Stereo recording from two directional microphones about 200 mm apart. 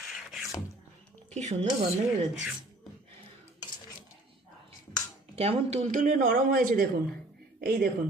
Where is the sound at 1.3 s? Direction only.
35° right (ahead or behind).